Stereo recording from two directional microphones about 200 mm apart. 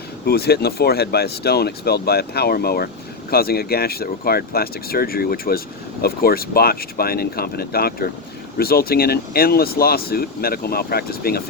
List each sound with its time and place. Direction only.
0.3 s speech: 50° left (ahead or behind)